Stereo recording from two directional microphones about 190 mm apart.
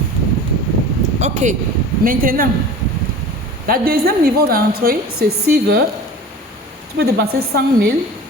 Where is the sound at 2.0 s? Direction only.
50° right (ahead or behind).